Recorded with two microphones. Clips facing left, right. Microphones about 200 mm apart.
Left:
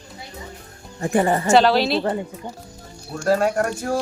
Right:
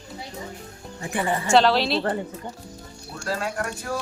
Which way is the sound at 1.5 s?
Centre (ahead or behind).